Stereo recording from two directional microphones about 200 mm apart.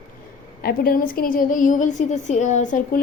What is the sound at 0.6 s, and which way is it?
A woman's voice, 50° left (ahead or behind).